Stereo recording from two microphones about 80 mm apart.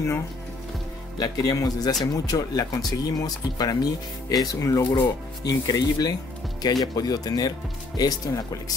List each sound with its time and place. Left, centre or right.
1.2 s speech: left